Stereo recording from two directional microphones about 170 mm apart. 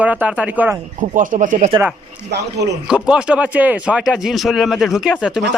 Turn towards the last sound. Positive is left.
turn(degrees=-5)  # may be behind; listen again after turning